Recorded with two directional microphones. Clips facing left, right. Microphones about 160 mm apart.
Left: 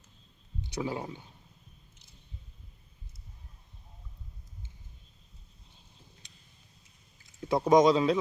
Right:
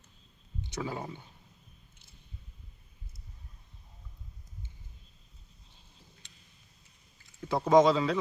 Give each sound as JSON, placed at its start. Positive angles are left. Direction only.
{"t": 0.7, "sound": "speech", "side_deg": 10}
{"t": 7.4, "sound": "speech", "side_deg": 15}